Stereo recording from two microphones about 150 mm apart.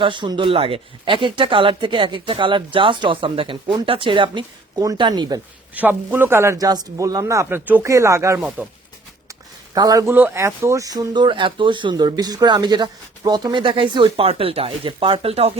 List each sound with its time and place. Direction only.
0.0 s speech: 30° right (ahead or behind)
5.7 s speech: 10° right (ahead or behind)
8.4 s speech: 5° right (ahead or behind)
9.7 s speech: 25° right (ahead or behind)
10.1 s speech: 15° right (ahead or behind); by 15.5 s 40° right (ahead or behind)